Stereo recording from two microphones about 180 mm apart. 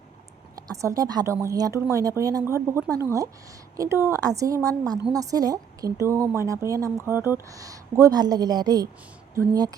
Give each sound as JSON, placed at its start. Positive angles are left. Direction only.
{"t": 0.5, "sound": "a woman's voice", "side_deg": -15}